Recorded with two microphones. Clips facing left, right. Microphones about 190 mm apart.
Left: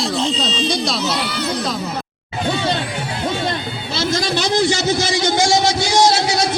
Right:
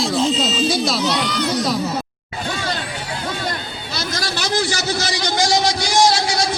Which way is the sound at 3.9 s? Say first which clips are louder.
Left 6 dB; 25° left (ahead or behind).